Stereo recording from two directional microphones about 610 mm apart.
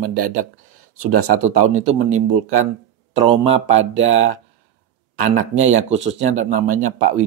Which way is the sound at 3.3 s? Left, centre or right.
Centre.